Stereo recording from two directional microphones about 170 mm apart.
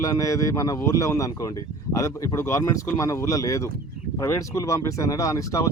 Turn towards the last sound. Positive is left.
turn(degrees=20)  # may be behind; listen again after turning